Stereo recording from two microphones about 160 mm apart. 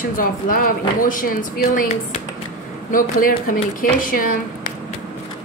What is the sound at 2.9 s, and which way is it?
A woman's voice, 60° left (ahead or behind).